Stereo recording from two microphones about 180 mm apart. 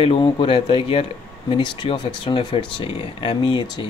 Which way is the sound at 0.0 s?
30° left (ahead or behind).